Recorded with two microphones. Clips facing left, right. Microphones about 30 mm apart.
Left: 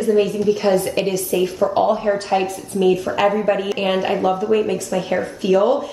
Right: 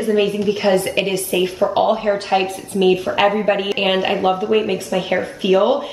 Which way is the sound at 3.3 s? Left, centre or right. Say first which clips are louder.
Right 1 dB; right.